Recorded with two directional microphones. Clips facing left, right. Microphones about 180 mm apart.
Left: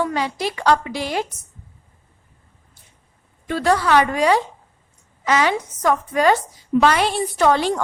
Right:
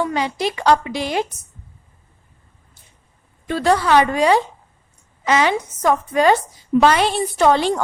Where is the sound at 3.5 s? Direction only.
25° right (ahead or behind).